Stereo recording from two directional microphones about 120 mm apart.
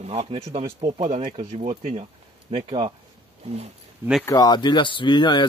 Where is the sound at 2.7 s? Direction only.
50° right (ahead or behind).